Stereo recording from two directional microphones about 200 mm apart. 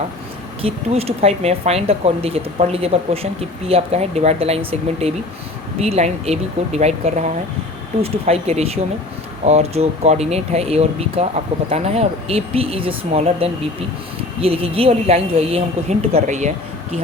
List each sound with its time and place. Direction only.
0.6 s speech: 30° right (ahead or behind)